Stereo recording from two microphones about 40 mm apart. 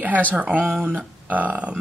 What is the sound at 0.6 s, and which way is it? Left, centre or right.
Speech, right.